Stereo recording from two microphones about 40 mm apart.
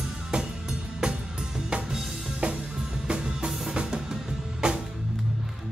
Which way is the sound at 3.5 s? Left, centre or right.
Centre.